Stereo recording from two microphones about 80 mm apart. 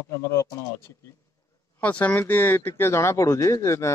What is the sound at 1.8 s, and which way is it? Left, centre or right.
Speech, centre.